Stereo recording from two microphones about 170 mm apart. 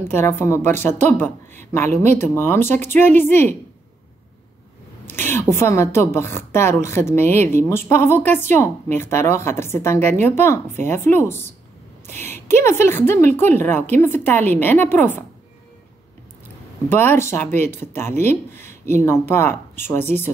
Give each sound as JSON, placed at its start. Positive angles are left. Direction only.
{"t": 0.0, "sound": "a woman's voice", "side_deg": 15}
{"t": 5.0, "sound": "a woman's voice", "side_deg": 15}
{"t": 16.9, "sound": "a woman's voice", "side_deg": 10}